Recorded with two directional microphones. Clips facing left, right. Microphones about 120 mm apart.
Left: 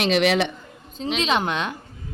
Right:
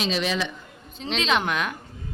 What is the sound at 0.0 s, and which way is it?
Speech, 70° left (ahead or behind).